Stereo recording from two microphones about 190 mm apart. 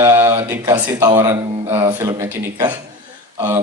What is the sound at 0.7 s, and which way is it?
A man's voice, 10° right (ahead or behind).